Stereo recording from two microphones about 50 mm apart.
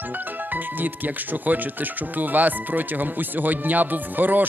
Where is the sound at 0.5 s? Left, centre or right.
Right.